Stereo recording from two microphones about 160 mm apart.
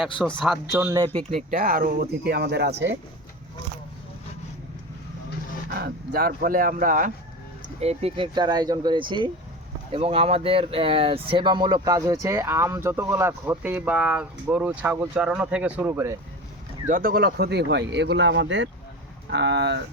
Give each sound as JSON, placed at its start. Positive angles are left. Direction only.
{"t": 0.2, "sound": "a man's voice", "side_deg": 0}
{"t": 0.7, "sound": "speech", "side_deg": -20}
{"t": 1.3, "sound": "speech", "side_deg": -50}
{"t": 5.7, "sound": "speech", "side_deg": -80}
{"t": 7.8, "sound": "speech", "side_deg": -40}
{"t": 16.9, "sound": "speech", "side_deg": -65}
{"t": 19.3, "sound": "speech", "side_deg": -90}